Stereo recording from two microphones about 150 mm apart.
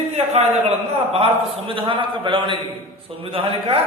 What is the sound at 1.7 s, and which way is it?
A man's voice, 35° right (ahead or behind).